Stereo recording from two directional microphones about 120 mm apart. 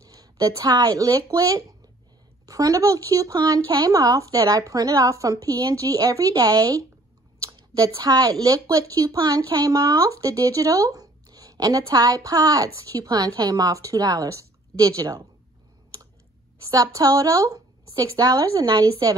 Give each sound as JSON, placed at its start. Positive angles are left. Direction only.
{"t": 0.0, "sound": "speech", "side_deg": -30}
{"t": 16.6, "sound": "speech", "side_deg": -30}